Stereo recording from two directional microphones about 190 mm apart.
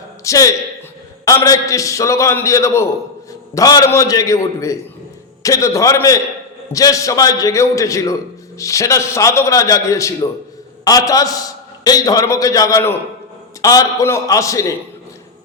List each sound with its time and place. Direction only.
0.3 s a man's voice: 15° left (ahead or behind)